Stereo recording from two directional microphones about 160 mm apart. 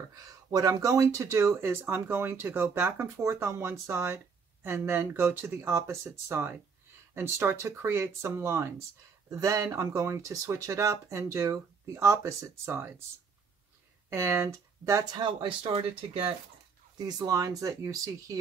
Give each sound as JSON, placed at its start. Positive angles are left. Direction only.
{"t": 0.1, "sound": "speech", "side_deg": -20}
{"t": 14.1, "sound": "speech", "side_deg": -15}
{"t": 17.2, "sound": "speech", "side_deg": -20}